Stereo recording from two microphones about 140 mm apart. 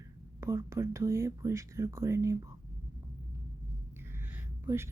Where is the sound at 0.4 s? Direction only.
20° right (ahead or behind).